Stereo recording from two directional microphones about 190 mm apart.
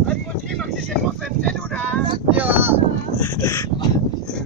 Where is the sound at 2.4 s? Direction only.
10° right (ahead or behind).